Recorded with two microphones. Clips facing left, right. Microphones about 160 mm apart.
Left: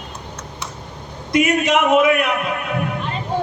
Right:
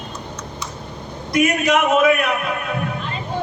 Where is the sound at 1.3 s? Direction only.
20° left (ahead or behind).